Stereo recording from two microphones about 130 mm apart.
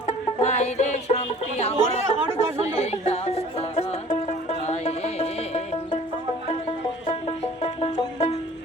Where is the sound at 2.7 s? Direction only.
60° left (ahead or behind).